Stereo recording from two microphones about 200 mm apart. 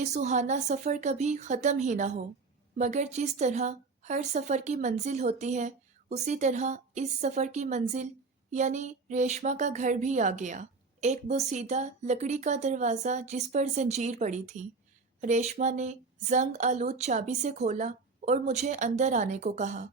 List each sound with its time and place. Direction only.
0.0 s speech: 35° right (ahead or behind)